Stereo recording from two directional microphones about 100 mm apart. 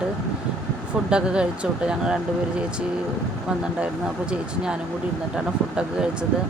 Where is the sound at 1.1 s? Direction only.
10° right (ahead or behind).